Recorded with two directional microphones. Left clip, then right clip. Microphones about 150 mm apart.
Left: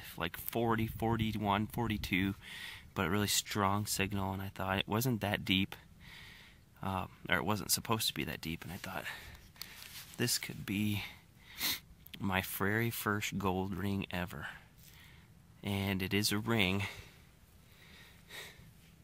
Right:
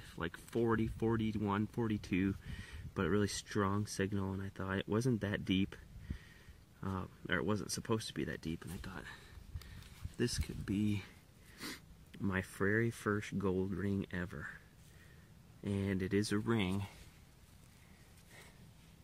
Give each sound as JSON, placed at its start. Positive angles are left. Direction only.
{"t": 0.1, "sound": "speech", "side_deg": 25}
{"t": 6.8, "sound": "speech", "side_deg": 25}
{"t": 10.1, "sound": "speech", "side_deg": 20}
{"t": 12.2, "sound": "speech", "side_deg": 30}
{"t": 15.6, "sound": "speech", "side_deg": 35}
{"t": 16.4, "sound": "speech", "side_deg": 20}